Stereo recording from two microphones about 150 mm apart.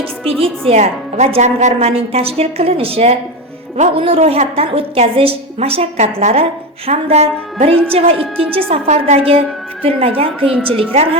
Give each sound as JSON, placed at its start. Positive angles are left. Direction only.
{"t": 0.3, "sound": "a woman's voice", "side_deg": -40}
{"t": 0.7, "sound": "a woman's voice", "side_deg": -50}